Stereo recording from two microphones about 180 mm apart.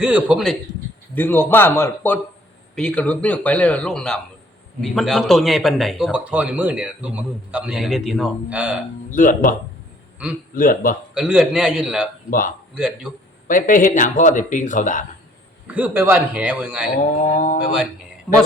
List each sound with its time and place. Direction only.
0.0 s a man's voice: 5° right (ahead or behind)
1.1 s a man's voice: 10° left (ahead or behind); by 8.8 s 5° right (ahead or behind)
9.0 s speech: 45° left (ahead or behind)
11.1 s a man's voice: 5° right (ahead or behind)
12.3 s speech: 50° left (ahead or behind)
12.7 s a man's voice: 5° right (ahead or behind)
13.5 s speech: 50° left (ahead or behind)
15.6 s a man's voice: 10° right (ahead or behind)
17.2 s speech: 45° left (ahead or behind)